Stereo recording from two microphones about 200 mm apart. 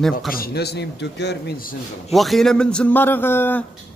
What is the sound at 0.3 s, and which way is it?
Speech, 50° left (ahead or behind).